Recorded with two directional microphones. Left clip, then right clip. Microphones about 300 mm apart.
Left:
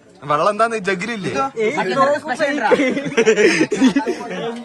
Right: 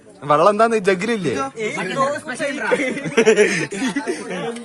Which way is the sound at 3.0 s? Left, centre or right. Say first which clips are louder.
Even; centre.